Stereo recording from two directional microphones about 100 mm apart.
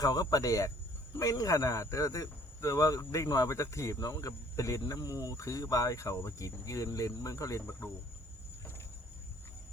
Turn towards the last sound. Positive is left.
turn(degrees=35)  # may be behind; listen again after turning